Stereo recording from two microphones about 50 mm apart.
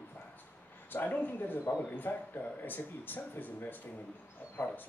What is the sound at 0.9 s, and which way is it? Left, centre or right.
Speech, left.